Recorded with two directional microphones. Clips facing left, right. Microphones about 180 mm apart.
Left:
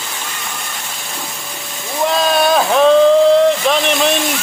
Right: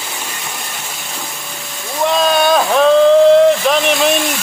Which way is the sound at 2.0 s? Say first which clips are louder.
Right 1 dB; centre (ahead or behind).